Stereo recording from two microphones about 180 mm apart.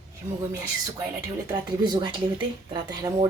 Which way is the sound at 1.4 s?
25° right (ahead or behind).